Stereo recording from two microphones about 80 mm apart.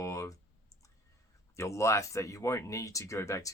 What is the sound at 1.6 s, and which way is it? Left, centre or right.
Speech, left.